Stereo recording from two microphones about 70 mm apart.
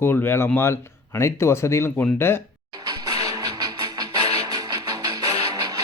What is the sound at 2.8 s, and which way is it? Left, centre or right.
Music, right.